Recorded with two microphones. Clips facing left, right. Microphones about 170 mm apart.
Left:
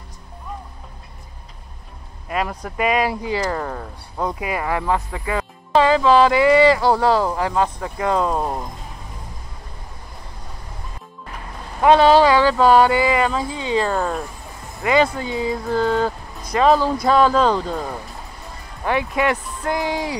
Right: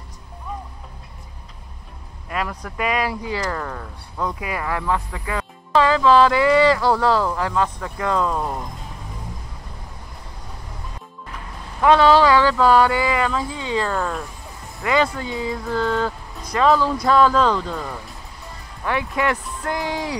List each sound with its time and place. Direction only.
2.2 s speech: 20° left (ahead or behind)
11.8 s speech: 20° left (ahead or behind)
18.9 s speech: 15° left (ahead or behind)